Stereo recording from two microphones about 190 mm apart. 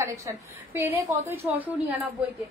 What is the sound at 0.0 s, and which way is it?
A woman's voice, 15° right (ahead or behind).